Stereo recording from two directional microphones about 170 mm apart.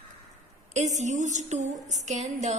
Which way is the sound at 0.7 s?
45° right (ahead or behind).